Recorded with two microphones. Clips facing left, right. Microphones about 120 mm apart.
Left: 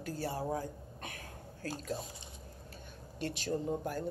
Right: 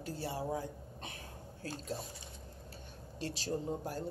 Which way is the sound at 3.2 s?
35° right (ahead or behind).